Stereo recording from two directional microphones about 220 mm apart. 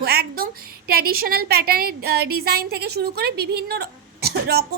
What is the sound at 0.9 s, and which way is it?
A woman's voice, 45° right (ahead or behind).